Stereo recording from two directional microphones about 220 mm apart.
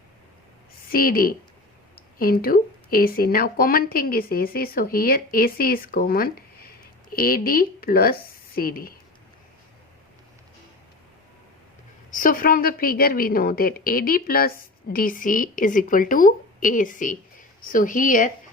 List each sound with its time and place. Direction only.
0.9 s speech: 40° left (ahead or behind)
12.1 s speech: 40° left (ahead or behind)